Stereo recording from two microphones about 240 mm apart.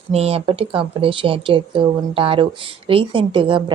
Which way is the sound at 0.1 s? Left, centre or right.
Right.